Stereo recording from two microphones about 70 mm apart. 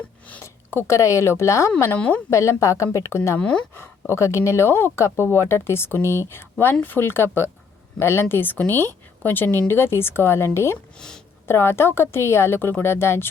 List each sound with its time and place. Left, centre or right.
0.7 s speech: left
0.9 s a woman's voice: left
2.0 s a woman's voice: centre
2.3 s a woman's voice: left
10.9 s speech: centre
11.4 s speech: left